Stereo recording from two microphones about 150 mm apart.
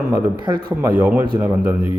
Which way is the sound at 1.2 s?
20° right (ahead or behind).